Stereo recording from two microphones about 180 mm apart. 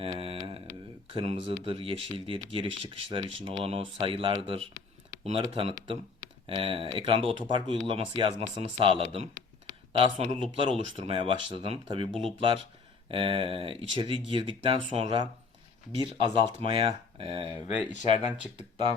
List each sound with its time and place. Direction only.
0.0 s mantra: 30° right (ahead or behind)
1.1 s speech: 35° right (ahead or behind)
16.0 s speech: 30° right (ahead or behind)
17.7 s speech: 40° left (ahead or behind)